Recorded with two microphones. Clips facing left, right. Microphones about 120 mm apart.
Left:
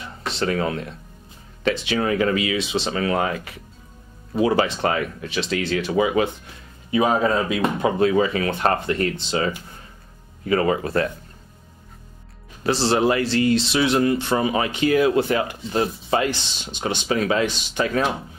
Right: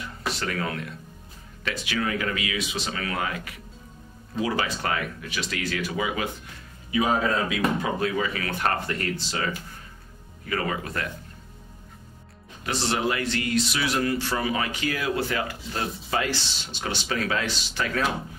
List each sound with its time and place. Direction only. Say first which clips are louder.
0.3 s speech: left 7 dB; 25° left (ahead or behind)
12.6 s speech: left 7 dB; 30° left (ahead or behind)